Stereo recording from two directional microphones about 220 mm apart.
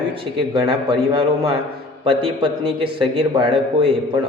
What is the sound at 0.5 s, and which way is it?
A man's voice, 25° right (ahead or behind).